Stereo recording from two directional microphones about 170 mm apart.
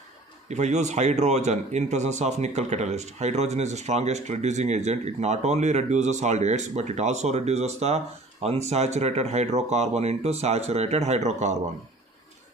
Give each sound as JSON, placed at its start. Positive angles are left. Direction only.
{"t": 0.5, "sound": "a man's voice", "side_deg": -40}